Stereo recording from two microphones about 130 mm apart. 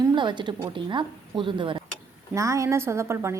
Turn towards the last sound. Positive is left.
turn(degrees=-20)  # may be behind; listen again after turning